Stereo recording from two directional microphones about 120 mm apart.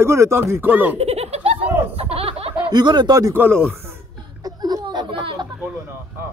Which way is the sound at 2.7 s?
40° right (ahead or behind).